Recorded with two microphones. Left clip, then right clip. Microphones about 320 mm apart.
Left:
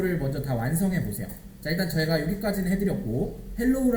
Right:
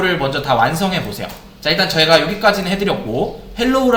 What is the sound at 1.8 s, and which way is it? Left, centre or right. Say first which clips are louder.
Speech: right 15 dB; right.